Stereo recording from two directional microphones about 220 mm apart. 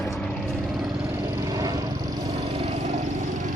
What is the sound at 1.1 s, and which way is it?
Vehicle, 15° right (ahead or behind).